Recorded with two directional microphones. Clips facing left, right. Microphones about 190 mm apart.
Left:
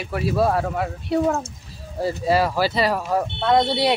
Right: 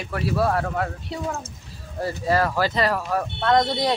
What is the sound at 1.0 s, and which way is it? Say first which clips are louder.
Speech: left 9 dB; 60° left (ahead or behind).